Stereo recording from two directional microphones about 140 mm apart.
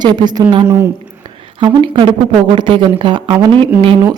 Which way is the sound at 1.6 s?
35° right (ahead or behind).